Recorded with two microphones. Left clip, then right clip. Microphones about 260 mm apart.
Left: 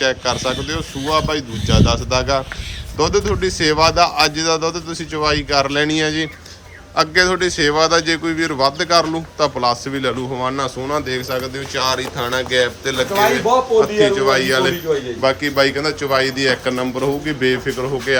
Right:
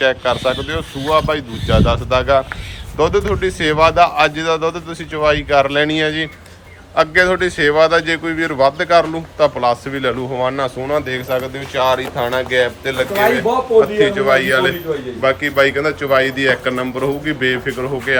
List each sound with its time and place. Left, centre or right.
0.0 s a man's voice: centre